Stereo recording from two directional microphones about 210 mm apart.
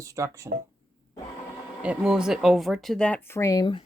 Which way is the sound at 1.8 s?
5° right (ahead or behind).